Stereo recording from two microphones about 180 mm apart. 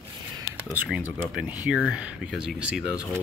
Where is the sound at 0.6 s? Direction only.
10° right (ahead or behind).